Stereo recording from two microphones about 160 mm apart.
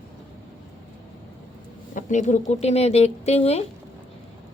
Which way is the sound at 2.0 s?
50° left (ahead or behind).